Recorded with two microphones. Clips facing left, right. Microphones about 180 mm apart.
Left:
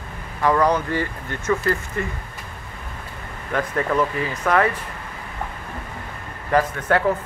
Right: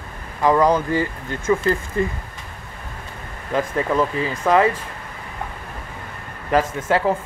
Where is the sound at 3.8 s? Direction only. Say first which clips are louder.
Even; 25° right (ahead or behind).